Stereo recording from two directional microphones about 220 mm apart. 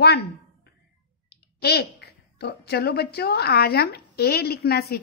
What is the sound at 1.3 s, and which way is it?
Speech, 45° left (ahead or behind).